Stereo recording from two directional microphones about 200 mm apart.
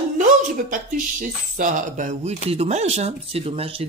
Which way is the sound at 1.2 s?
40° right (ahead or behind).